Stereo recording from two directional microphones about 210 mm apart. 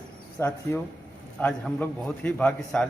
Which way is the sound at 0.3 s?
15° left (ahead or behind).